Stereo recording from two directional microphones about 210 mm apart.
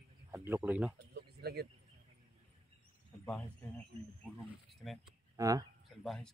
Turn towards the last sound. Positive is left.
turn(degrees=0)  # may be behind; listen again after turning